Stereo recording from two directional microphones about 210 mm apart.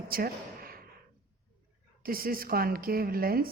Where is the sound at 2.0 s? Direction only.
45° right (ahead or behind).